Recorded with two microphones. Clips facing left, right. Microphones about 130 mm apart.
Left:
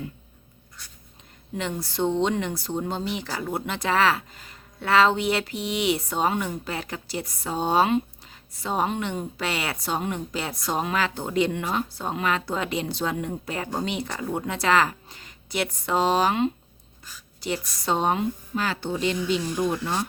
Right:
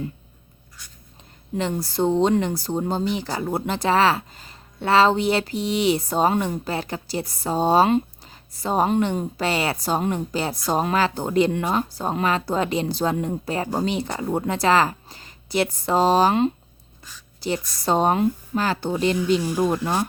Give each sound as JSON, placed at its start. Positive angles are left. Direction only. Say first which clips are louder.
{"t": 1.5, "sound": "speech", "louder": "right 4 dB", "side_deg": -35}